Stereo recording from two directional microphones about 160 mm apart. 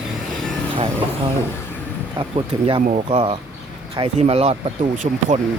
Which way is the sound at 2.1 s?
35° right (ahead or behind).